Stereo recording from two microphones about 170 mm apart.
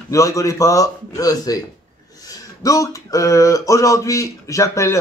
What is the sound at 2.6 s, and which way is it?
Speech, 20° left (ahead or behind).